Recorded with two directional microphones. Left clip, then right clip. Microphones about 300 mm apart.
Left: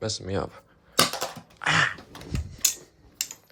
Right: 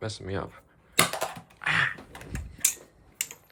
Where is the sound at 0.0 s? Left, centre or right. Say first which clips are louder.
Left 4 dB; centre.